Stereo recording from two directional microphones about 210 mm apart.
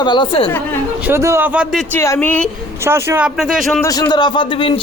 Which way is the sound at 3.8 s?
15° left (ahead or behind).